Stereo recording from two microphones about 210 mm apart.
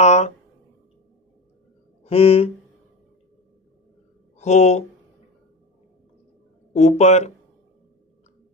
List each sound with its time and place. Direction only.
0.0 s a sound: 35° left (ahead or behind)
2.0 s speech: 30° left (ahead or behind)
4.4 s speech: 35° left (ahead or behind)
6.7 s speech: 30° left (ahead or behind)